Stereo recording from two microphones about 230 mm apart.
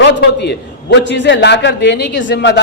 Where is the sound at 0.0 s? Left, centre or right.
Left.